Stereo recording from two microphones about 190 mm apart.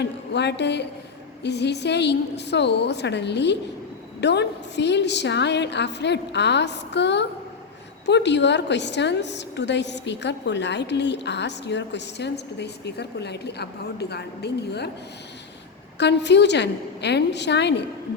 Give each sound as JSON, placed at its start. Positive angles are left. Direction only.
{"t": 0.0, "sound": "a woman's voice", "side_deg": 65}
{"t": 16.0, "sound": "a woman's voice", "side_deg": 65}